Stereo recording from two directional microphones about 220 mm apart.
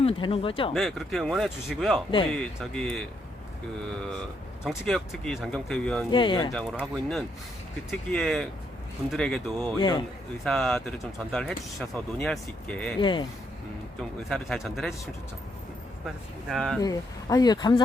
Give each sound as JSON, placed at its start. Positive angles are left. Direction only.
{"t": 0.0, "sound": "speech", "side_deg": 25}
{"t": 0.7, "sound": "speech", "side_deg": 0}
{"t": 4.9, "sound": "speech", "side_deg": 0}
{"t": 6.1, "sound": "speech", "side_deg": 20}
{"t": 6.5, "sound": "speech", "side_deg": 5}
{"t": 9.7, "sound": "speech", "side_deg": 20}
{"t": 10.4, "sound": "speech", "side_deg": 0}
{"t": 13.0, "sound": "speech", "side_deg": 20}
{"t": 14.3, "sound": "speech", "side_deg": 0}
{"t": 16.0, "sound": "speech", "side_deg": 0}
{"t": 16.8, "sound": "speech", "side_deg": 15}